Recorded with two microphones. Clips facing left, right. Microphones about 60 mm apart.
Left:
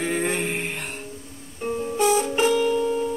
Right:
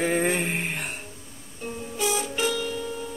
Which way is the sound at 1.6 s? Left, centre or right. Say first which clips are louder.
Left 7 dB; left.